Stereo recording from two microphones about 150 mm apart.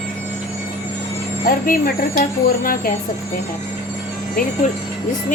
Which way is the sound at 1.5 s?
70° left (ahead or behind).